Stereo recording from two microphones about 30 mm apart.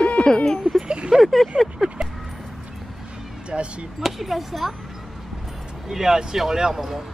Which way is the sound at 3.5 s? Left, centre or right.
Right.